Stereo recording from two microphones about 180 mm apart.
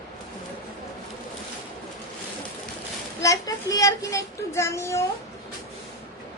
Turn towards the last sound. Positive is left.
turn(degrees=15)  # may be behind; listen again after turning